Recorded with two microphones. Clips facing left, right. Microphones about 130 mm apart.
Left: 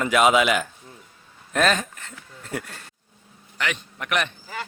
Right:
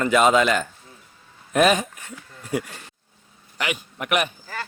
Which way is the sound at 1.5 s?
10° right (ahead or behind).